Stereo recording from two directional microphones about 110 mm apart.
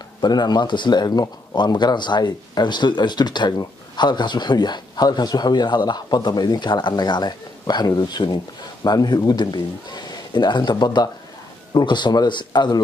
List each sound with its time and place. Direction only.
0.2 s speech: 40° left (ahead or behind)